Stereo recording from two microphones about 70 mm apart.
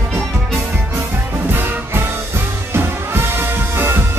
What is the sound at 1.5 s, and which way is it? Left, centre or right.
Music, right.